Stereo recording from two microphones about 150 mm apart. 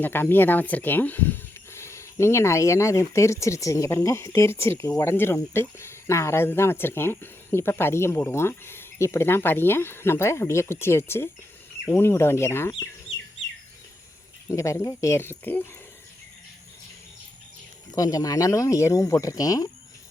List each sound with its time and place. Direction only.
0.0 s speech: 15° left (ahead or behind)
14.5 s speech: 20° left (ahead or behind)
17.9 s speech: 25° left (ahead or behind)